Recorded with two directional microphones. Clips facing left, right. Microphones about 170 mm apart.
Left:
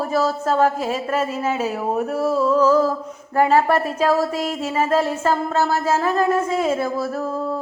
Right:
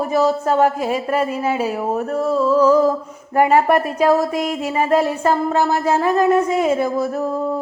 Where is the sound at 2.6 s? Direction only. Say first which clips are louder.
Right 3 dB; 15° right (ahead or behind).